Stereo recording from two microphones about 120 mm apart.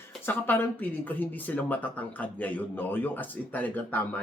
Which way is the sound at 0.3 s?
15° left (ahead or behind).